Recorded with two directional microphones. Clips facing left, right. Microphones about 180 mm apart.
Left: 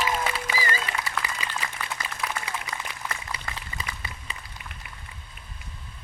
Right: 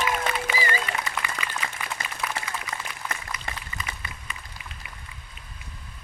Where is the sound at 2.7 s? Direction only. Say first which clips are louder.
Even; 30° left (ahead or behind).